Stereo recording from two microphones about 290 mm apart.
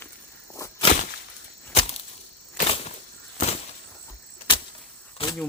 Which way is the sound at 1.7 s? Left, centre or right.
Left.